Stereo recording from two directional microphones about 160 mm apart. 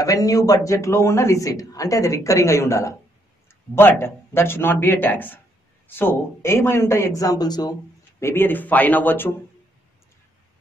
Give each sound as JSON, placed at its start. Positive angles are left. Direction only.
{"t": 0.0, "sound": "a man's voice", "side_deg": 20}
{"t": 8.2, "sound": "speech", "side_deg": 15}